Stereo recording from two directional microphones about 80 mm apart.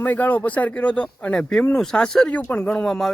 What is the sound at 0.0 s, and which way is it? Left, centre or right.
A man's voice, left.